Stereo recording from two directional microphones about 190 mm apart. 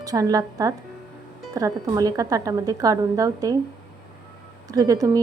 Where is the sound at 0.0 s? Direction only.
20° right (ahead or behind).